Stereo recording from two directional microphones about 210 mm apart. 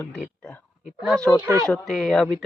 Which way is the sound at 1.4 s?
15° right (ahead or behind).